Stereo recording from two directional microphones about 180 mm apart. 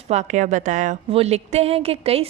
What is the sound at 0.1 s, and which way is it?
A woman's voice, 40° right (ahead or behind).